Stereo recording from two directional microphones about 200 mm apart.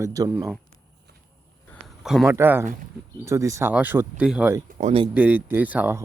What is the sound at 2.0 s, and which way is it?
Speech, 5° right (ahead or behind).